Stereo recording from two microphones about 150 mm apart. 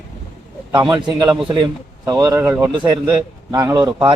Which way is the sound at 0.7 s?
25° right (ahead or behind).